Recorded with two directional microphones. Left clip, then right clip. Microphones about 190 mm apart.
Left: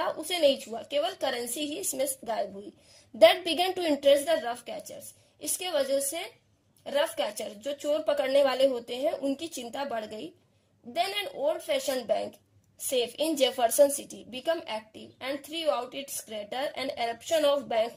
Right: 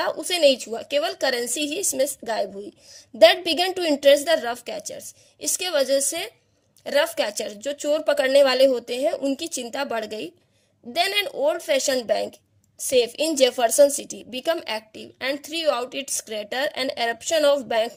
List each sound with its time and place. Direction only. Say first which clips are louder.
0.0 s a woman's voice: right 6 dB; 35° right (ahead or behind)